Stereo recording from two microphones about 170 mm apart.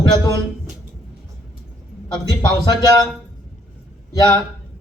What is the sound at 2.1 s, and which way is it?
Speech, 25° left (ahead or behind).